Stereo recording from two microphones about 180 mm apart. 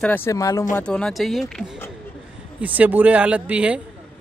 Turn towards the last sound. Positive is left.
turn(degrees=-5)  # may be behind; listen again after turning